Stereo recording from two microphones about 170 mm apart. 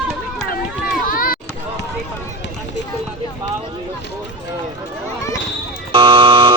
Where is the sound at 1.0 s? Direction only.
55° left (ahead or behind).